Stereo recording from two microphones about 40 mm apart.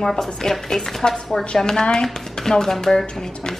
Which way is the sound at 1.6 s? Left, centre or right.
Left.